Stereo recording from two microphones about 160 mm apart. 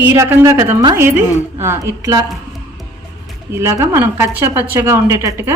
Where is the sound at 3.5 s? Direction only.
20° right (ahead or behind).